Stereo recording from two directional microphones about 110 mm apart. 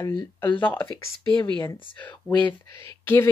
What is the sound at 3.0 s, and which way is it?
Speech, 20° left (ahead or behind).